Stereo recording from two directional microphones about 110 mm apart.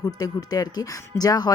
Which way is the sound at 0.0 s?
35° left (ahead or behind).